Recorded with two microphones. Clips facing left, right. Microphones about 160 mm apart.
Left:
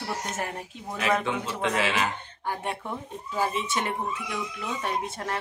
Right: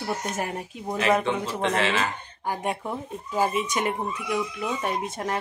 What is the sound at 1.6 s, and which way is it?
Speech, 5° left (ahead or behind).